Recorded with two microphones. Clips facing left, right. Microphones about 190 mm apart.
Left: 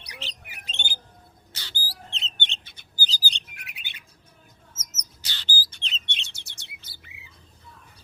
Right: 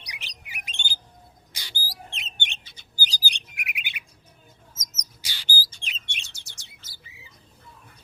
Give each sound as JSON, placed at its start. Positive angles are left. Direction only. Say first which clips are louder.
{"t": 0.1, "sound": "bird", "louder": "left 8 dB", "side_deg": -15}
{"t": 0.5, "sound": "squawk", "louder": "right 1 dB", "side_deg": -15}
{"t": 1.5, "sound": "a sound", "louder": "right 1 dB", "side_deg": -15}
{"t": 2.9, "sound": "bird", "louder": "even", "side_deg": -15}
{"t": 5.2, "sound": "rodents", "louder": "right 1 dB", "side_deg": -10}
{"t": 5.8, "sound": "bird", "louder": "left 2 dB", "side_deg": -10}
{"t": 6.2, "sound": "chirp", "louder": "left 2 dB", "side_deg": 60}
{"t": 6.8, "sound": "bird", "louder": "even", "side_deg": 60}